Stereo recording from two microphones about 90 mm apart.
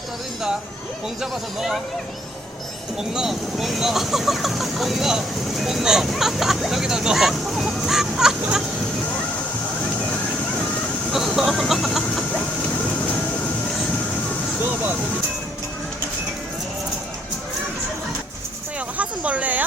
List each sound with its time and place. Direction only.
1.2 s speech: 5° right (ahead or behind)
3.0 s speech: 5° right (ahead or behind)
11.1 s vehicle: centre (ahead or behind)
18.9 s speech: 15° right (ahead or behind)